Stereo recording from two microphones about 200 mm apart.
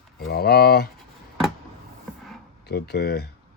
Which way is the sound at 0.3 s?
50° left (ahead or behind).